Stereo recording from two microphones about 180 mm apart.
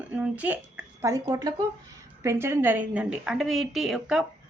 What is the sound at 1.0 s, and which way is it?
A woman's voice, 20° right (ahead or behind).